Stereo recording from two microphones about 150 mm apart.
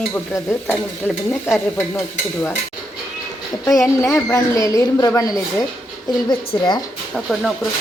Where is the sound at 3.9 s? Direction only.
20° left (ahead or behind).